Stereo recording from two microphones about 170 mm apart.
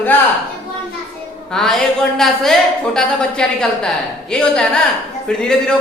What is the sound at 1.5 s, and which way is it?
A woman's voice, centre (ahead or behind).